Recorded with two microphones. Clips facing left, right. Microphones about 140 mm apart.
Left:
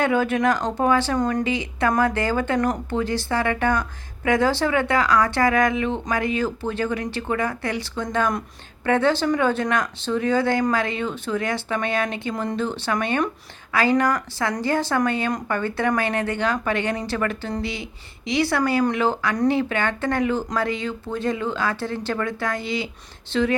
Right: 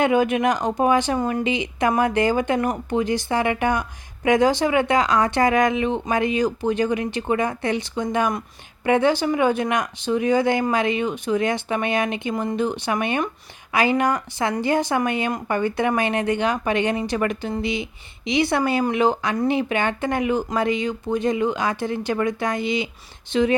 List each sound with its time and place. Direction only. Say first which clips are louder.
0.0 s speech: right 2 dB; 15° right (ahead or behind)
1.2 s speech: left 1 dB; 5° right (ahead or behind)
1.5 s speech: right 1 dB; 20° right (ahead or behind)